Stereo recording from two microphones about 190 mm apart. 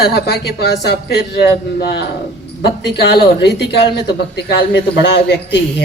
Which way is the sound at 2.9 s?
60° left (ahead or behind).